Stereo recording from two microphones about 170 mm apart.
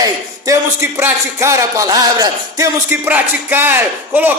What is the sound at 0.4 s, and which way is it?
A man's voice, 15° right (ahead or behind).